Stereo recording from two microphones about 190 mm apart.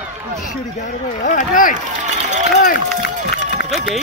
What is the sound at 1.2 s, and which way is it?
Speech, 45° left (ahead or behind).